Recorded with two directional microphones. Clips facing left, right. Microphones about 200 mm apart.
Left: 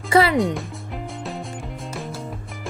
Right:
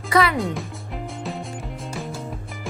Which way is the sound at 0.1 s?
30° left (ahead or behind).